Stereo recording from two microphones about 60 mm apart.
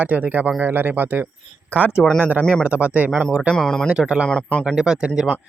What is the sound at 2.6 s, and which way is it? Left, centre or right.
Speech, right.